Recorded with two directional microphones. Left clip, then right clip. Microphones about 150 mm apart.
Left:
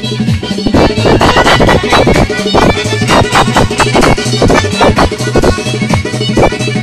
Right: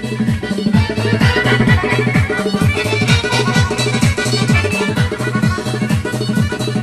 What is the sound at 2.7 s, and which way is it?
Music, 5° right (ahead or behind).